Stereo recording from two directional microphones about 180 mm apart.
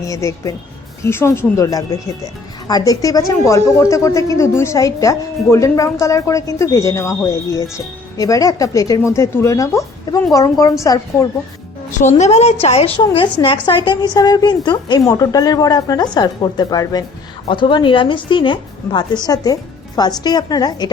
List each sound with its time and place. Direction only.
0.1 s a woman's voice: 20° left (ahead or behind)
8.2 s a woman's voice: 20° left (ahead or behind)
11.9 s a woman's voice: 40° left (ahead or behind); by 20.9 s 25° left (ahead or behind)